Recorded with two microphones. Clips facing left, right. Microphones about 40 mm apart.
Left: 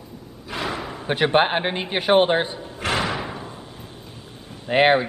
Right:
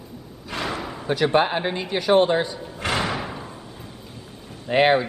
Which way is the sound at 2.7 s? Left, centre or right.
Centre.